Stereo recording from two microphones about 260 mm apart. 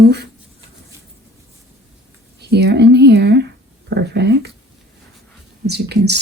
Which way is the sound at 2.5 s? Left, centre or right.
Right.